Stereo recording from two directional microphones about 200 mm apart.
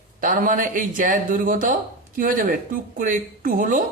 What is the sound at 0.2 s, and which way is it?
Speech, 40° right (ahead or behind).